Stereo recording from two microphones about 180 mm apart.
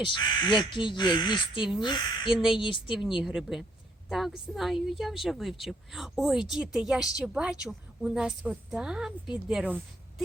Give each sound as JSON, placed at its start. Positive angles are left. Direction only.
{"t": 0.0, "sound": "speech", "side_deg": 25}
{"t": 2.3, "sound": "a woman's voice", "side_deg": 0}
{"t": 2.6, "sound": "speech", "side_deg": 30}
{"t": 3.2, "sound": "a woman's voice", "side_deg": 0}